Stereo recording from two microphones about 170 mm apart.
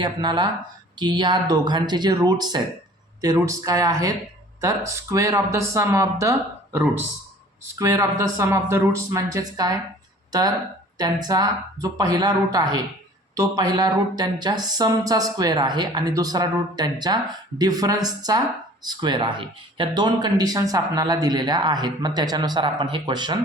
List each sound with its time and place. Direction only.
0.0 s speech: 25° right (ahead or behind)
7.8 s speech: 20° right (ahead or behind)